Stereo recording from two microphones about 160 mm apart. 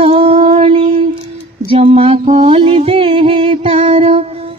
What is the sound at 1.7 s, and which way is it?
Music, 35° right (ahead or behind).